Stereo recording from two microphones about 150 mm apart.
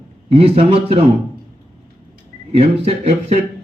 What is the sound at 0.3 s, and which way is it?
Speech, 40° right (ahead or behind).